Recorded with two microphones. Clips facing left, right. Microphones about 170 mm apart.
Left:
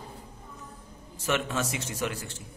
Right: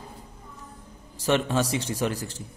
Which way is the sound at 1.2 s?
35° right (ahead or behind).